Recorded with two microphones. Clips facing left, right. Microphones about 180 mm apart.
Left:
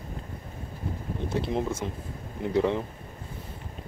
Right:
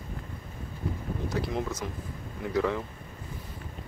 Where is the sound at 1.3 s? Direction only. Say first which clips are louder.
Left 3 dB; 25° left (ahead or behind).